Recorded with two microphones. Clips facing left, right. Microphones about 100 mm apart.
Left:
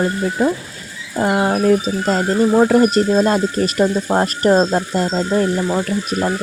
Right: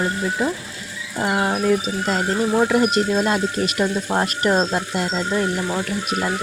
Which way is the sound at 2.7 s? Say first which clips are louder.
Left 5 dB; 40° left (ahead or behind).